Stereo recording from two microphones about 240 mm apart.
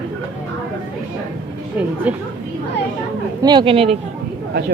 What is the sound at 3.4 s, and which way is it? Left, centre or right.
Speech, centre.